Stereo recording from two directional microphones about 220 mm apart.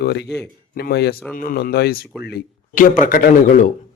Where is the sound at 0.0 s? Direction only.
50° left (ahead or behind).